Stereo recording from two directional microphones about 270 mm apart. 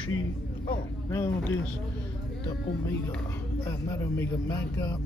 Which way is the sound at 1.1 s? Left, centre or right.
Centre.